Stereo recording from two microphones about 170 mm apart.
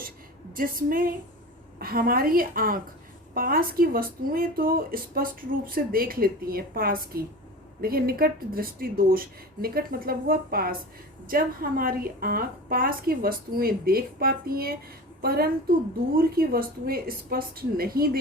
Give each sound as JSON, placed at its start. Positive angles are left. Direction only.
{"t": 0.5, "sound": "a woman's voice", "side_deg": -55}